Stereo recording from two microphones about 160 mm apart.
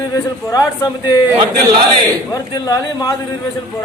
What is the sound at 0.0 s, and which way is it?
A man's voice, 20° left (ahead or behind).